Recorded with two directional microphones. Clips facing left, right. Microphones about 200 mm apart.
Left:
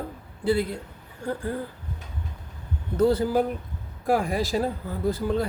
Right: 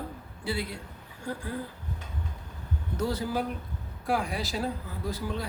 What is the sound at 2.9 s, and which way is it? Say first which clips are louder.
A man's voice: left 9 dB; 55° left (ahead or behind).